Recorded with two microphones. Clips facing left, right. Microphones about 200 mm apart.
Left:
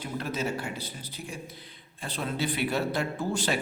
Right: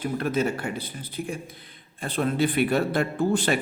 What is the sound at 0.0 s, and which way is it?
A man's voice, 55° right (ahead or behind).